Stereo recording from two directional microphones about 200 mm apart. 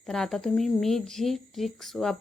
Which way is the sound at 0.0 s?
Centre (ahead or behind).